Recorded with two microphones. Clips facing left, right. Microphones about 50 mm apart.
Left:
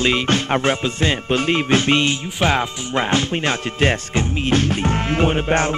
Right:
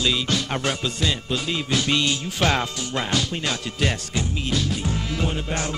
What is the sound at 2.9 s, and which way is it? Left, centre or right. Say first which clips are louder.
Music: left 7 dB; left.